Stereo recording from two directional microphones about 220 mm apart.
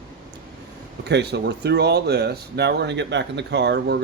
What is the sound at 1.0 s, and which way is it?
Speech, 50° right (ahead or behind).